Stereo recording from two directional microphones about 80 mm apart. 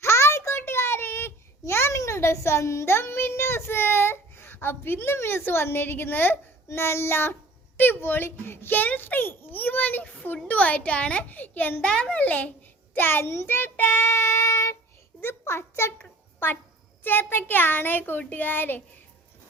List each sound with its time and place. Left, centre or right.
0.0 s a sound: left
7.8 s a child's voice: left
17.0 s a child's voice: left